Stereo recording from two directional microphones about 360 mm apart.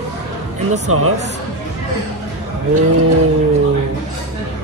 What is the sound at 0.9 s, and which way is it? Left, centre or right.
Speech, right.